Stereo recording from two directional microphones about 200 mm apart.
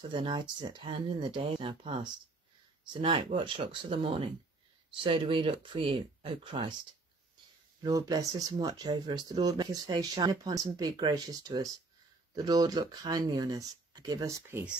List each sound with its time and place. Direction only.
0.1 s speech: 20° right (ahead or behind)
7.8 s speech: 20° right (ahead or behind)